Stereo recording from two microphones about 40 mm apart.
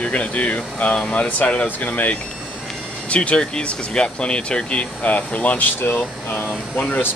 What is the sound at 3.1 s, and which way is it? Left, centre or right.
Speech, left.